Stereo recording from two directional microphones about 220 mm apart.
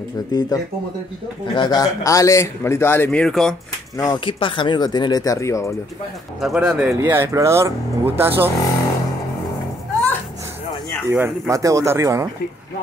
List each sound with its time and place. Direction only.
0.3 s a man's voice: 20° left (ahead or behind); by 3.5 s centre (ahead or behind)
3.9 s a man's voice: 15° left (ahead or behind)
6.4 s speech: 5° right (ahead or behind)
11.1 s speech: 10° right (ahead or behind)